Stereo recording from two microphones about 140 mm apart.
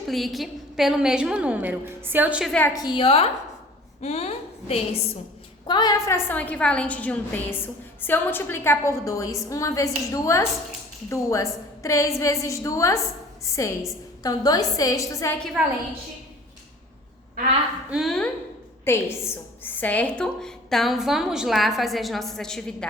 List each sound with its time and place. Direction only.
0.1 s a woman's voice: centre (ahead or behind)
2.4 s a woman's voice: 5° left (ahead or behind)
2.6 s a woman's voice: 30° left (ahead or behind); by 4.8 s 50° left (ahead or behind)
5.6 s a woman's voice: 30° left (ahead or behind)
15.6 s a woman's voice: 5° right (ahead or behind)
17.9 s a woman's voice: centre (ahead or behind)
18.9 s a woman's voice: 15° left (ahead or behind)